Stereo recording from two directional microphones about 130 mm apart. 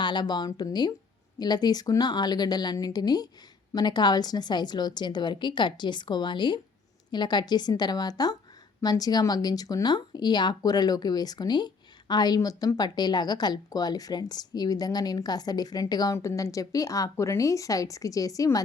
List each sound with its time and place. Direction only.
0.0 s a woman's voice: 35° left (ahead or behind)